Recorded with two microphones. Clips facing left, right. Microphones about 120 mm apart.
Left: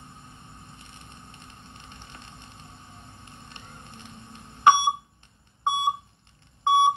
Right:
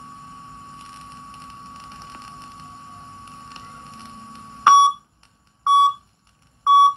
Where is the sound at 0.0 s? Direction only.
60° right (ahead or behind).